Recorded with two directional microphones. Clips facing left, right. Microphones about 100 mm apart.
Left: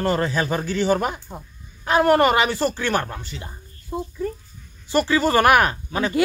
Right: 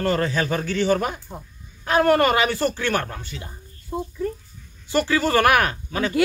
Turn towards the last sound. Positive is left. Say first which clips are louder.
# left 2 dB
turn(degrees=25)  # may be behind; listen again after turning